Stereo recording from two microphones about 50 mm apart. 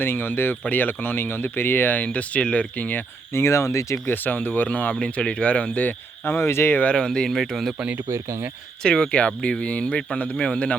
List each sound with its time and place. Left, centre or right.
0.0 s speech: left
0.6 s speech: left
2.1 s speech: left
3.3 s speech: left
4.0 s speech: left
4.9 s speech: centre
6.2 s speech: left
6.9 s speech: centre
7.3 s speech: centre
8.1 s speech: right
8.8 s speech: left